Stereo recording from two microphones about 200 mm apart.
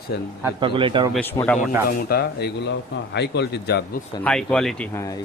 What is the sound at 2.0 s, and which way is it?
A man's voice, 50° left (ahead or behind).